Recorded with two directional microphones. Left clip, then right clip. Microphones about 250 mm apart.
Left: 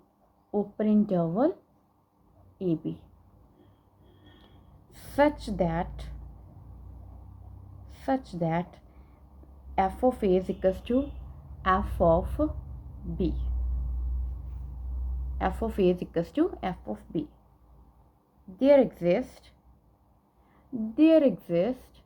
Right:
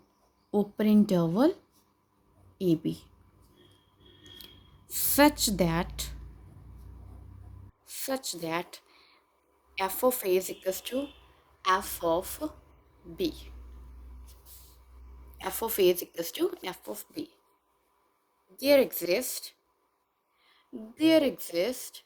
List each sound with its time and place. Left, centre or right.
0.5 s a woman's voice: right
2.6 s a woman's voice: right
4.9 s a woman's voice: right
7.9 s a woman's voice: right
15.5 s a woman's voice: right
18.5 s a woman's voice: right
21.0 s a woman's voice: right